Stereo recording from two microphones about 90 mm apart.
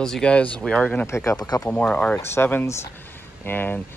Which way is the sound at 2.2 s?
25° left (ahead or behind).